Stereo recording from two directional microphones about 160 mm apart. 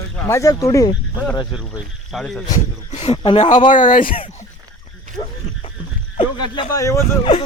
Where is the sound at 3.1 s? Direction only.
30° left (ahead or behind).